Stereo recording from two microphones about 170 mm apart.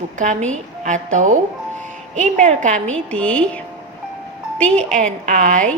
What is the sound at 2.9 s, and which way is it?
A woman's voice, 5° left (ahead or behind).